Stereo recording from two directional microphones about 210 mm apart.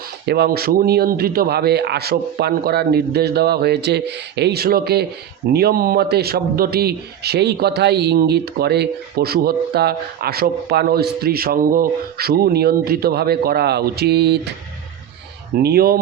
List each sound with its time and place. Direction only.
0.3 s a man's voice: 50° right (ahead or behind)
15.5 s a man's voice: 50° right (ahead or behind)